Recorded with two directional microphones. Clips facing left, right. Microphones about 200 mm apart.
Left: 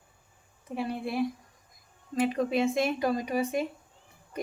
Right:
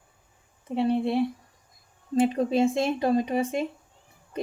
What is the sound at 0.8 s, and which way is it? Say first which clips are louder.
Speech: right 6 dB; 25° right (ahead or behind).